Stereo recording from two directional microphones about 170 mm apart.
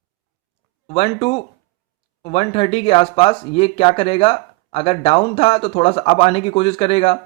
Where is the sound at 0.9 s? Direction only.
35° left (ahead or behind).